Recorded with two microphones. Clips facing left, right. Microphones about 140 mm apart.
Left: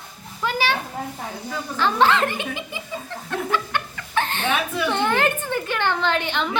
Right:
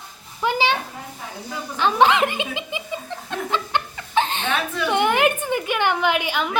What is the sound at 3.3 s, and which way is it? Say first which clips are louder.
Chuckle: left 1 dB; 20° right (ahead or behind).